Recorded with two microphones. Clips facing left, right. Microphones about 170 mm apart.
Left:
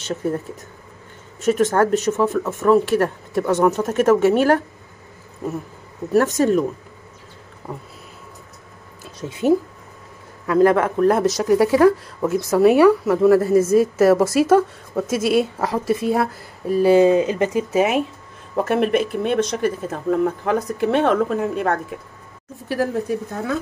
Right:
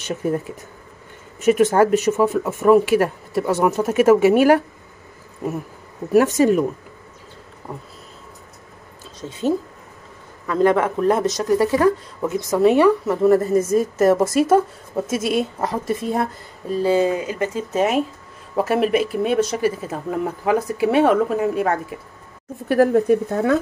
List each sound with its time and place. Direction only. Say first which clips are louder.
0.0 s speech: right 1 dB; 10° right (ahead or behind)
1.4 s speech: right 2 dB; 10° right (ahead or behind)
6.1 s speech: right 2 dB; 10° right (ahead or behind)
9.0 s a sound: left 2 dB; 10° left (ahead or behind)
10.4 s speech: left 2 dB; 5° left (ahead or behind)
18.6 s speech: even; 5° right (ahead or behind)
22.7 s speech: right 7 dB; 55° right (ahead or behind)